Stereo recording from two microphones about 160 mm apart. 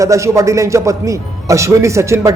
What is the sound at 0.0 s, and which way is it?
A man's voice, 20° right (ahead or behind).